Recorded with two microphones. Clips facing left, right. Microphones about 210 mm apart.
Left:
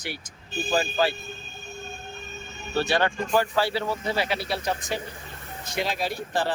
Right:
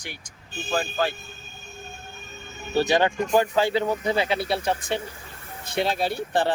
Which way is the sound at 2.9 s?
20° right (ahead or behind).